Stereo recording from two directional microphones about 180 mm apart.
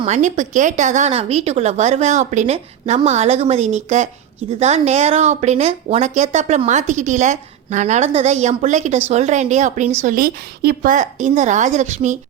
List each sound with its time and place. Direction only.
0.0 s a woman's voice: 40° right (ahead or behind)